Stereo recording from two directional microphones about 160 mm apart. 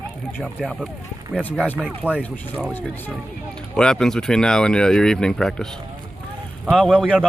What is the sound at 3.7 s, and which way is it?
Speech, 5° left (ahead or behind).